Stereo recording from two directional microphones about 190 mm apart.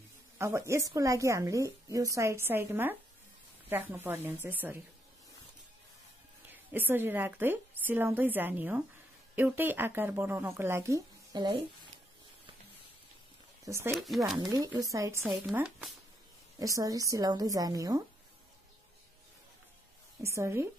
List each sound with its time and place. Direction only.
0.4 s a woman's voice: 15° right (ahead or behind)
6.5 s a woman's voice: 10° right (ahead or behind)
13.7 s a woman's voice: 15° right (ahead or behind)
13.9 s speech: centre (ahead or behind)
14.4 s a woman's voice: 20° right (ahead or behind)
16.5 s a woman's voice: 20° right (ahead or behind)
20.2 s a woman's voice: 15° right (ahead or behind)